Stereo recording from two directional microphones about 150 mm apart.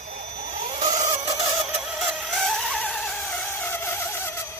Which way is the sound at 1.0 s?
25° right (ahead or behind).